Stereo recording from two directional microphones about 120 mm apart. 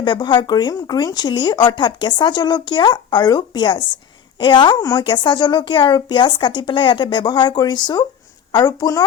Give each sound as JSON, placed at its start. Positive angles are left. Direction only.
{"t": 0.0, "sound": "speech", "side_deg": 40}